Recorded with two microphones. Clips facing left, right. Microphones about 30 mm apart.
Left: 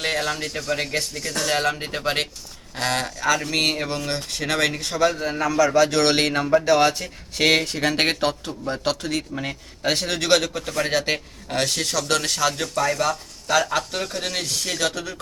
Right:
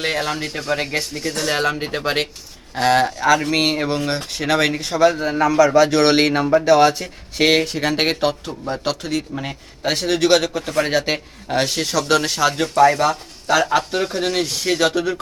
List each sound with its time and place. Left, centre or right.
0.0 s a man's voice: centre